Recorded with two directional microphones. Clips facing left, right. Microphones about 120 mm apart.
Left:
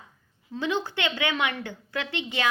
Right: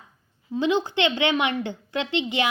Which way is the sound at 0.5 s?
15° right (ahead or behind).